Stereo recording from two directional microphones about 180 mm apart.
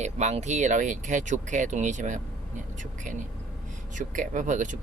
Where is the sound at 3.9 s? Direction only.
45° right (ahead or behind).